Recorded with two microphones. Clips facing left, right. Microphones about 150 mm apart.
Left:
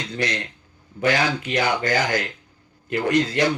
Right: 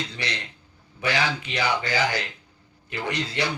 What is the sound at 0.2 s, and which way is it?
Speech, 45° left (ahead or behind).